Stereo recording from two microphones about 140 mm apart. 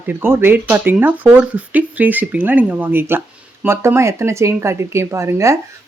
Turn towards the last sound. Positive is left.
turn(degrees=-20)  # may be behind; listen again after turning